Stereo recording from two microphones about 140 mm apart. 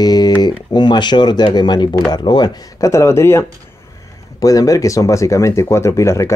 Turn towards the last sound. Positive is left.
turn(degrees=20)  # may be behind; listen again after turning